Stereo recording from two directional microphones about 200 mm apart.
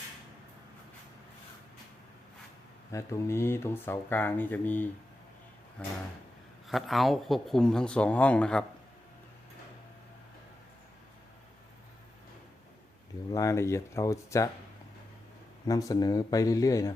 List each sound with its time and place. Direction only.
2.9 s speech: 15° left (ahead or behind)
13.3 s speech: 15° left (ahead or behind)
15.6 s speech: 20° left (ahead or behind)